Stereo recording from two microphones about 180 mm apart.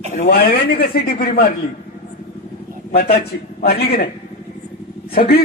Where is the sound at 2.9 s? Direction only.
60° left (ahead or behind).